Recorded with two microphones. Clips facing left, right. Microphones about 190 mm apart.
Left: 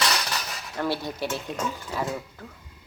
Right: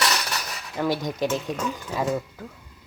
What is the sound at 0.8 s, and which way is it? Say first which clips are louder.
Speech: right 4 dB; 15° right (ahead or behind).